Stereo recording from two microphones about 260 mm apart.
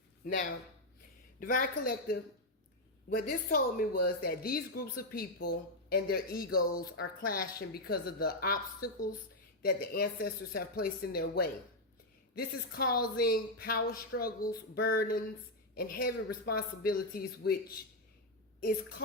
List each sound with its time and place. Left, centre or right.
0.3 s a man's voice: left
3.2 s a man's voice: left